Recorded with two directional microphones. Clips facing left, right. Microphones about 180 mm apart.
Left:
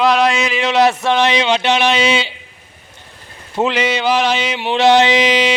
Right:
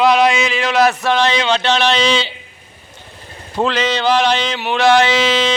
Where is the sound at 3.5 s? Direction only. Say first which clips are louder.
Left 1 dB; 15° left (ahead or behind).